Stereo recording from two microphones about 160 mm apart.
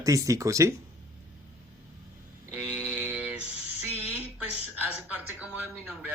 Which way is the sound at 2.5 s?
10° right (ahead or behind).